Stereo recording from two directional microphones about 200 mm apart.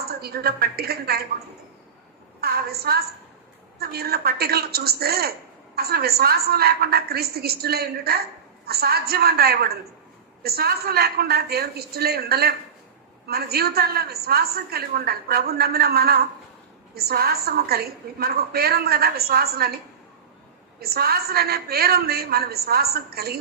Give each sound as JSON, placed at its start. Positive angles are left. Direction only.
{"t": 0.0, "sound": "a woman's voice", "side_deg": -50}
{"t": 2.4, "sound": "a woman's voice", "side_deg": -50}